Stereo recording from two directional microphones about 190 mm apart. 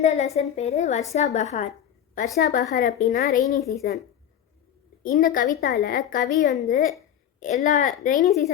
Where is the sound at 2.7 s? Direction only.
40° left (ahead or behind).